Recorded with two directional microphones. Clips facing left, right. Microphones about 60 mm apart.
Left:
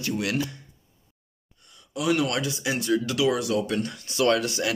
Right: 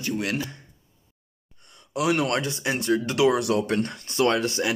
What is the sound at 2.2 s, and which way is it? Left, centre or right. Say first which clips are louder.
Speech: right 2 dB; right.